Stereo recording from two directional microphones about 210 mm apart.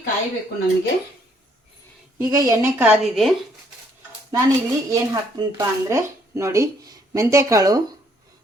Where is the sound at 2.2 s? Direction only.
15° right (ahead or behind).